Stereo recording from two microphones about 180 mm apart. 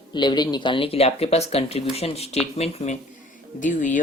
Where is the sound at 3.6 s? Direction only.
45° left (ahead or behind).